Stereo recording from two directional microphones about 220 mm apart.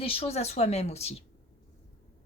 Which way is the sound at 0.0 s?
25° left (ahead or behind).